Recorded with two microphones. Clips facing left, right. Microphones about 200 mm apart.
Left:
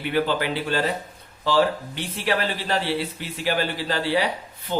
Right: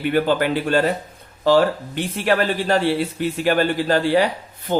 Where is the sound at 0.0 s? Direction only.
50° right (ahead or behind).